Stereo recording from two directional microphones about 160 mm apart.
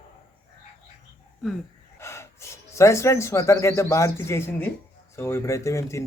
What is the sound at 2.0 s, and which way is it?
Speech, 15° left (ahead or behind).